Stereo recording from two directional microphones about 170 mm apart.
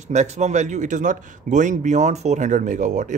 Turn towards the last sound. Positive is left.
turn(degrees=-45)  # may be behind; listen again after turning